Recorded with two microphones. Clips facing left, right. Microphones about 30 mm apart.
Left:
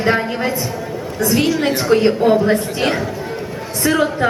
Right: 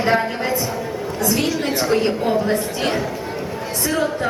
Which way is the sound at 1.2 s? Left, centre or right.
Left.